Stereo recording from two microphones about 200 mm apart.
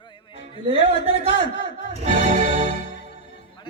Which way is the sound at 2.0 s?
35° right (ahead or behind).